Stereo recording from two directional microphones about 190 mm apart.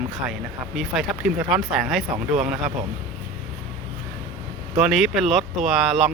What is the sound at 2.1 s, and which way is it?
Speech, 40° right (ahead or behind).